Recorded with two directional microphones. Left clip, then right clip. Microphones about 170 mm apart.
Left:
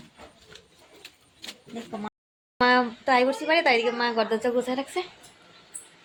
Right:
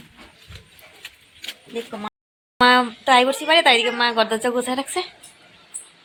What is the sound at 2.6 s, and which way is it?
A woman's voice, centre (ahead or behind).